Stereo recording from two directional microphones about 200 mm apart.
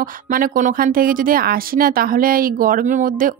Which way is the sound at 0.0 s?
45° right (ahead or behind).